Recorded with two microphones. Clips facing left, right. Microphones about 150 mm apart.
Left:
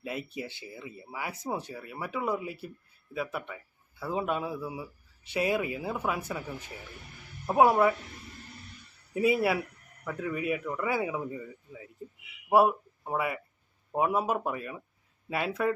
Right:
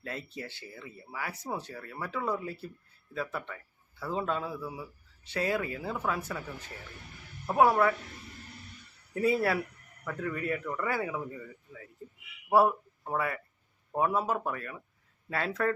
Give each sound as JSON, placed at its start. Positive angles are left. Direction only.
{"t": 0.0, "sound": "speech", "side_deg": 15}
{"t": 9.1, "sound": "speech", "side_deg": 15}